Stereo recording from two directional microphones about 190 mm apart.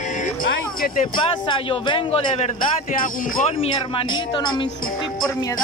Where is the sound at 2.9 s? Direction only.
45° left (ahead or behind).